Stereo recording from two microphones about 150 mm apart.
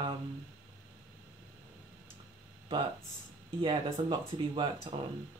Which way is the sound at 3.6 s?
30° right (ahead or behind).